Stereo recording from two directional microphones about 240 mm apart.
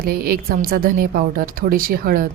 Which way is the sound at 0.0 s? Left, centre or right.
Right.